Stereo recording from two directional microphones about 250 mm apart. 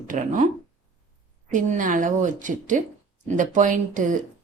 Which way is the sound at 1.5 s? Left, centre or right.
Right.